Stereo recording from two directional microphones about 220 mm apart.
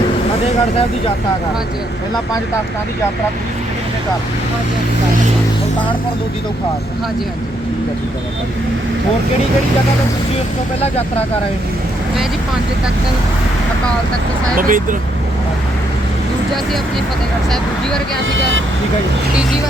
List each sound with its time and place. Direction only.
14.5 s speech: 40° right (ahead or behind)